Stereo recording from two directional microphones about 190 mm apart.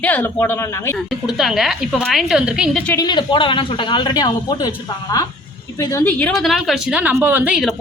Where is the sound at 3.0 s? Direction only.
25° left (ahead or behind).